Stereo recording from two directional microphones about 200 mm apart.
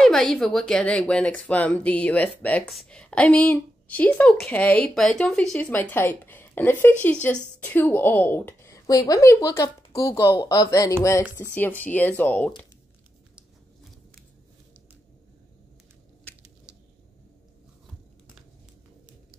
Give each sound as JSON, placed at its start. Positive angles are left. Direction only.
{"t": 0.0, "sound": "speech", "side_deg": 0}